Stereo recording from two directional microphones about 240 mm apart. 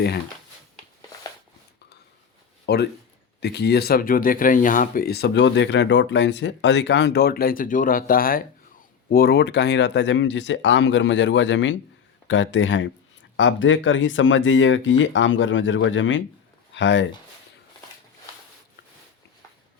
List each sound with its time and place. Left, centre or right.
2.7 s speech: left